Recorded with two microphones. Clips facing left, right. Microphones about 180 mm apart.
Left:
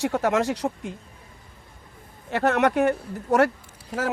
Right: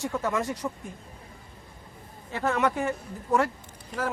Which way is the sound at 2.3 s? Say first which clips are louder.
Left 5 dB; 70° left (ahead or behind).